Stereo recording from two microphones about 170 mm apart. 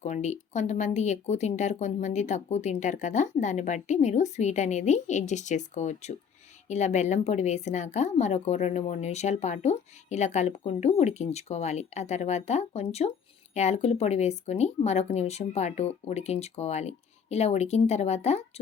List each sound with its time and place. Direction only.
0.0 s a woman's voice: 45° left (ahead or behind)